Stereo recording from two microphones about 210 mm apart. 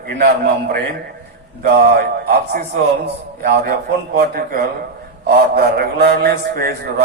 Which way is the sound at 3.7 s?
45° right (ahead or behind).